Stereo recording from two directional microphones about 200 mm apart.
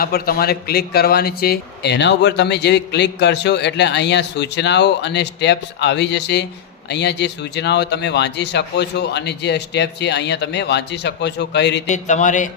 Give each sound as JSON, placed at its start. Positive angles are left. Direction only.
{"t": 0.0, "sound": "a man's voice", "side_deg": 50}
{"t": 11.9, "sound": "speech", "side_deg": 35}